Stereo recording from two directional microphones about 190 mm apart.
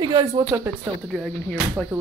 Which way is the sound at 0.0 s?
25° right (ahead or behind).